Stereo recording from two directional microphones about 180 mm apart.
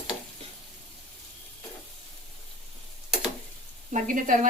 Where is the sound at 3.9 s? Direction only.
45° right (ahead or behind).